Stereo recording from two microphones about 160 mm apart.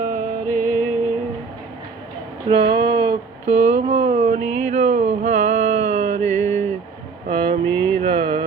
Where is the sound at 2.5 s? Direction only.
30° right (ahead or behind).